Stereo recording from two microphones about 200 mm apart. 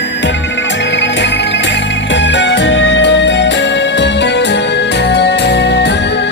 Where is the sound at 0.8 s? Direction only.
60° left (ahead or behind).